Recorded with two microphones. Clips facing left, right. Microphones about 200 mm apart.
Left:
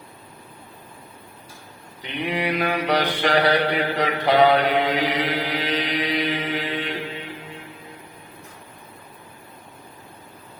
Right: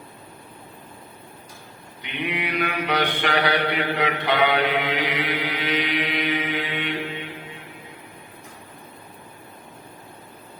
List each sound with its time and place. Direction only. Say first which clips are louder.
2.0 s mantra: left 3 dB; 35° left (ahead or behind)